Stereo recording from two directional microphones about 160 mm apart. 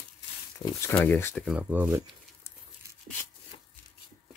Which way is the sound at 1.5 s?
10° right (ahead or behind).